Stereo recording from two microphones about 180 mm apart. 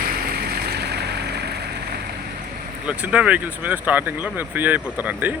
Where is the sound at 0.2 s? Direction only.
60° right (ahead or behind).